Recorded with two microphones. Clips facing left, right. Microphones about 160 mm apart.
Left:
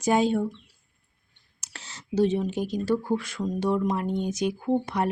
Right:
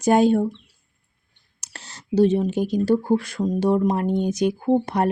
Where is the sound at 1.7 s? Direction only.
35° right (ahead or behind).